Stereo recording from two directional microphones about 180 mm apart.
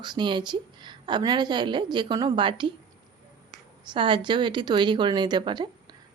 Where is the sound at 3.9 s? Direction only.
25° right (ahead or behind).